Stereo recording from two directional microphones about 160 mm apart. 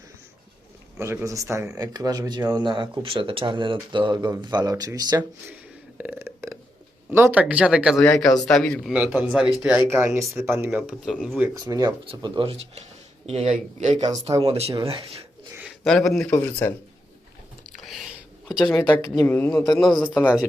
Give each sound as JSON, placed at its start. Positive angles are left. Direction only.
{"t": 0.9, "sound": "speech", "side_deg": -15}
{"t": 6.0, "sound": "burping", "side_deg": -10}
{"t": 7.1, "sound": "speech", "side_deg": -10}
{"t": 11.3, "sound": "speech", "side_deg": -20}
{"t": 15.5, "sound": "speech", "side_deg": -5}
{"t": 17.7, "sound": "a sound", "side_deg": 0}
{"t": 18.6, "sound": "speech", "side_deg": 10}